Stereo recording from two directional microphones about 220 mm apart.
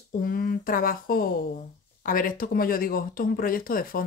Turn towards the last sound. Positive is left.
turn(degrees=40)  # may be behind; listen again after turning